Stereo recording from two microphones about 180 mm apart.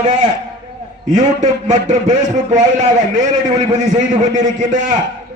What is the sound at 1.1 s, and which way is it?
A man's voice, 45° right (ahead or behind).